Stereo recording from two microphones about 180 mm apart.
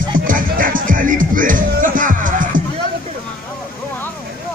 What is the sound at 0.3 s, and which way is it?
Music, 50° right (ahead or behind).